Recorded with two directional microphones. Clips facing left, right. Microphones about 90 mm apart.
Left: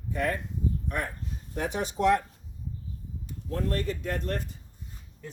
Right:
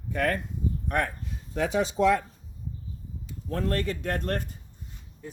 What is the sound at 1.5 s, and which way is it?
Speech, 90° right.